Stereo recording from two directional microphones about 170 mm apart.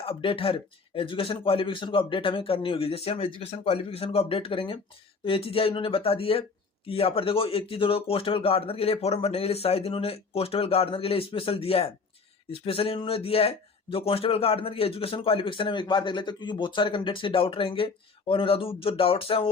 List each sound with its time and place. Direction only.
0.0 s speech: 30° left (ahead or behind)